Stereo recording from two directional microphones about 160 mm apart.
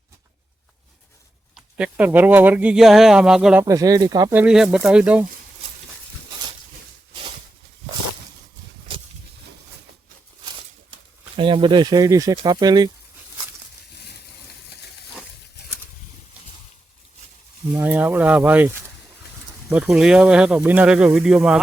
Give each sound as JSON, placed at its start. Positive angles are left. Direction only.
{"t": 1.5, "sound": "speech", "side_deg": -10}
{"t": 3.6, "sound": "speech", "side_deg": -20}
{"t": 4.4, "sound": "speech", "side_deg": -5}
{"t": 11.3, "sound": "speech", "side_deg": -30}
{"t": 17.7, "sound": "speech", "side_deg": -10}